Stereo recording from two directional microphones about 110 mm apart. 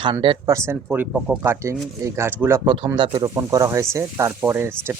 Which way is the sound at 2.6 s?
55° right (ahead or behind).